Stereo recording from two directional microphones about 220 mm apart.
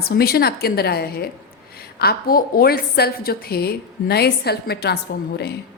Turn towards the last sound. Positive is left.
turn(degrees=45)  # may be behind; listen again after turning